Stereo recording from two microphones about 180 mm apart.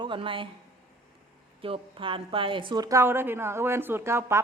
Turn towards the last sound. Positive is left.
turn(degrees=-15)  # may be behind; listen again after turning